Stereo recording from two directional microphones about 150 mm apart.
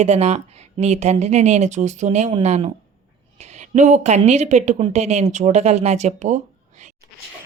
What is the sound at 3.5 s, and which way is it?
A woman's voice, 50° right (ahead or behind).